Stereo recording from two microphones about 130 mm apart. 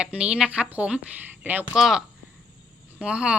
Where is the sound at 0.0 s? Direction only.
5° right (ahead or behind).